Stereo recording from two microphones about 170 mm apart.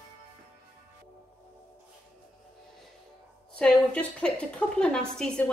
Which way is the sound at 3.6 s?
5° left (ahead or behind).